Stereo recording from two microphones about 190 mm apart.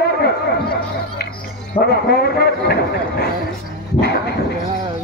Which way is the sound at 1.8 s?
55° left (ahead or behind).